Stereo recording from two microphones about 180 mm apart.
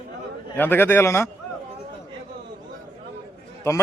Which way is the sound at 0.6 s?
10° left (ahead or behind).